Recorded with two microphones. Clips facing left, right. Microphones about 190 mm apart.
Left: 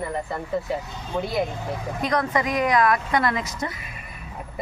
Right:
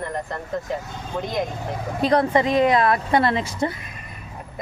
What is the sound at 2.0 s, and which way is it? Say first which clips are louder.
A woman's voice: right 6 dB; 30° right (ahead or behind).